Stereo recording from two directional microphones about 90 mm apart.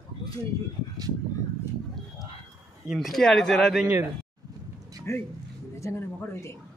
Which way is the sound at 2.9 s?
Centre (ahead or behind).